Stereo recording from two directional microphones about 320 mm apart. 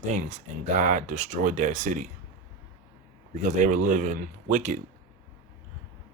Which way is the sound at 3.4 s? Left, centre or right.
Right.